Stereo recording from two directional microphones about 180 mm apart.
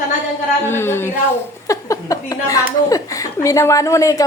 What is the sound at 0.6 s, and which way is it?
A woman's voice, 15° left (ahead or behind).